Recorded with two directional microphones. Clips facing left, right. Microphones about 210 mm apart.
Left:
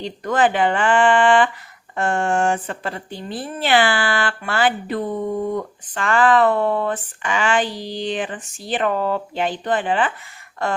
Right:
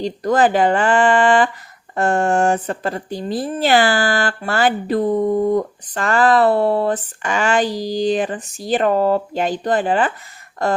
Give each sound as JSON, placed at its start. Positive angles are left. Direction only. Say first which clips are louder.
{"t": 0.0, "sound": "speech", "louder": "right 3 dB", "side_deg": -40}